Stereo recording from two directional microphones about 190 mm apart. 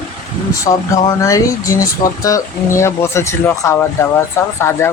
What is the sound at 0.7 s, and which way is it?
Speech, 35° left (ahead or behind).